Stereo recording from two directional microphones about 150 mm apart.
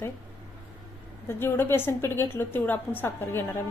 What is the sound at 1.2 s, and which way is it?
A woman's voice, 15° left (ahead or behind).